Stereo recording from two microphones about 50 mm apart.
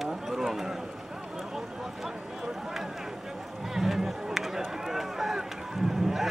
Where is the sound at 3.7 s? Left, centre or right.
Centre.